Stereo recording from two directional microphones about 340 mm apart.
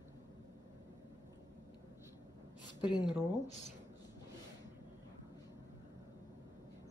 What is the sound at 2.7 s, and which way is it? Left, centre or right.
Speech, centre.